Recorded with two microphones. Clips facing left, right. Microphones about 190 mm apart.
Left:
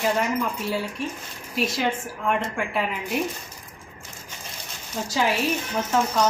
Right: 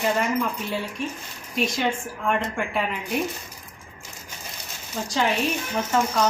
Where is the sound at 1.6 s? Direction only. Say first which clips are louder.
Even; 5° left (ahead or behind).